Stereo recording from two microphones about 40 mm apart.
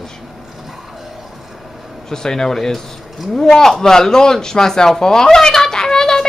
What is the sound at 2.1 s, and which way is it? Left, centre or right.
Speech, centre.